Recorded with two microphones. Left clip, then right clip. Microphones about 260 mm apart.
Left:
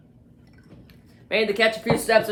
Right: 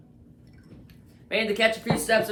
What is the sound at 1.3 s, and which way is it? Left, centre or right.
Speech, left.